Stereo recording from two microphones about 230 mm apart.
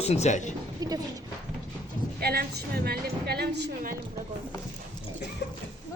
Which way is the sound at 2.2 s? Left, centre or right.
Right.